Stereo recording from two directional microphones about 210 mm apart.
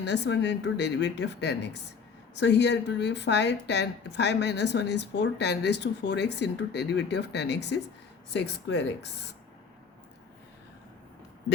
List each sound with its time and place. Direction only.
0.0 s a woman's voice: 55° left (ahead or behind)